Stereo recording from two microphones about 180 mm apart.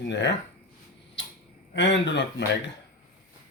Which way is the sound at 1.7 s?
90° left.